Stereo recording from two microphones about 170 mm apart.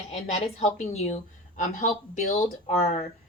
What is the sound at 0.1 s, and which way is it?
A woman's voice, 35° left (ahead or behind).